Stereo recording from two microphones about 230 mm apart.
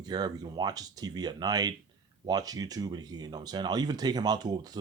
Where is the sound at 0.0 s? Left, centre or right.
Centre.